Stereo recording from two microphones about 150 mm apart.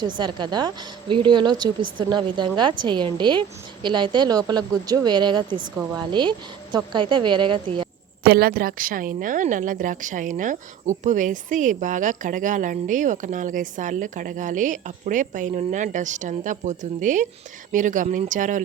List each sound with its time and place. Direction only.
0.0 s a woman's voice: 30° right (ahead or behind)
8.2 s speech: 90° right; by 18.6 s 60° right (ahead or behind)